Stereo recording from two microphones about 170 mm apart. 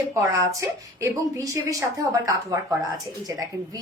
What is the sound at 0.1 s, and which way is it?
Speech, 15° right (ahead or behind).